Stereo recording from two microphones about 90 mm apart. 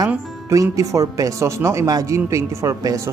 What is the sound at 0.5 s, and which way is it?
Speech, 40° right (ahead or behind).